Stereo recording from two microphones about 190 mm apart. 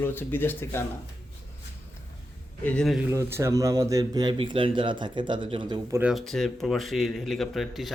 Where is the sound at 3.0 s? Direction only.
15° right (ahead or behind).